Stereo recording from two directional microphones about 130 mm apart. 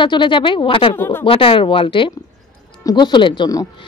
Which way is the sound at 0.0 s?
40° left (ahead or behind).